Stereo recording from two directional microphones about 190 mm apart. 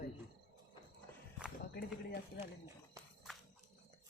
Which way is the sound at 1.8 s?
55° left (ahead or behind).